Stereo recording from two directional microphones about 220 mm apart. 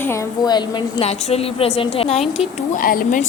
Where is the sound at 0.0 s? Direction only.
15° left (ahead or behind).